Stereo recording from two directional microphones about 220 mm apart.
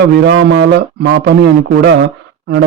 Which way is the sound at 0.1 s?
50° right (ahead or behind).